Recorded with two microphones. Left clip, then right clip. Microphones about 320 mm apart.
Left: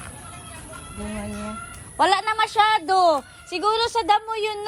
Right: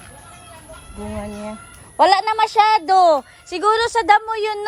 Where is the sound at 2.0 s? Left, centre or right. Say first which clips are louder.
Right 5 dB; right.